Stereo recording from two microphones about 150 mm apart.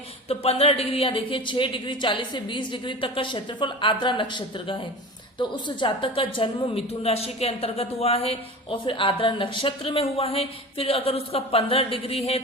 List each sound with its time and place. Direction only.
0.3 s a woman's voice: 40° left (ahead or behind)